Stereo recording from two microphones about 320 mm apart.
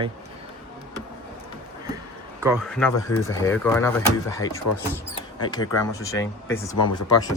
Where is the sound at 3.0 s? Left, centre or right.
Left.